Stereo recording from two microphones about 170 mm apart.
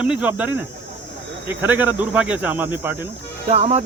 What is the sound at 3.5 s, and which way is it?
Speech, 40° right (ahead or behind).